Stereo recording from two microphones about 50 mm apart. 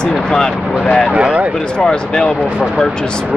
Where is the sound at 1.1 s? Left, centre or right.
Right.